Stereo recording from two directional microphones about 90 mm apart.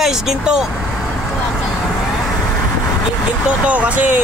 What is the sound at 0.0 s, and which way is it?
Speech, 5° right (ahead or behind).